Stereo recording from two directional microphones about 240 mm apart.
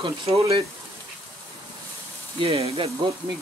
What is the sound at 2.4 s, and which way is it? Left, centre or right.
Speech, right.